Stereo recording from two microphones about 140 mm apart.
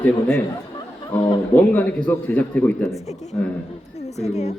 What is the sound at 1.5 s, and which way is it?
Speech, 10° left (ahead or behind).